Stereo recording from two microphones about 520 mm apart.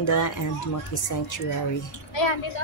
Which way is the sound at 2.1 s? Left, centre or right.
Left.